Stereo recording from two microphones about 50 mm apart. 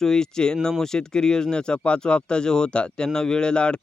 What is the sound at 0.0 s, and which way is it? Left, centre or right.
Speech, centre.